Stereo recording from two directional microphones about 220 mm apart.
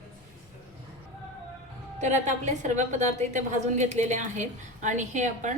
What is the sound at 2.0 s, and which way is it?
A woman's voice, 35° right (ahead or behind).